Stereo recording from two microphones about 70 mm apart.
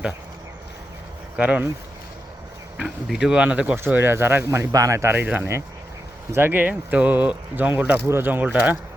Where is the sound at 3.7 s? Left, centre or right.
Right.